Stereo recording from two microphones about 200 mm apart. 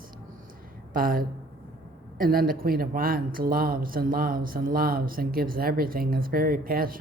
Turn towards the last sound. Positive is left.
turn(degrees=-45)  # may be behind; listen again after turning